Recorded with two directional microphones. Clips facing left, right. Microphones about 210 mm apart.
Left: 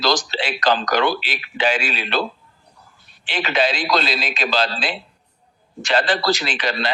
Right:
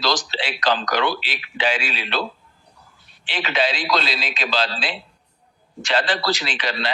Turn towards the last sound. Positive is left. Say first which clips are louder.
# left 3 dB
turn(degrees=45)  # may be behind; listen again after turning